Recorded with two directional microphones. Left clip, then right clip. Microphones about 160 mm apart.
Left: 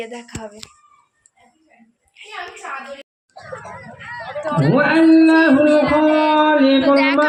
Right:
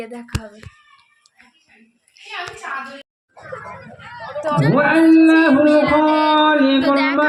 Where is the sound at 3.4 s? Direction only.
Centre (ahead or behind).